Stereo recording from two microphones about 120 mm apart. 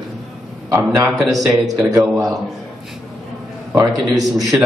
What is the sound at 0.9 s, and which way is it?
A man's voice, 15° right (ahead or behind).